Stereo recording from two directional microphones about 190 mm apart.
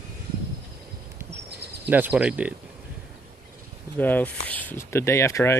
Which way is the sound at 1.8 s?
10° right (ahead or behind).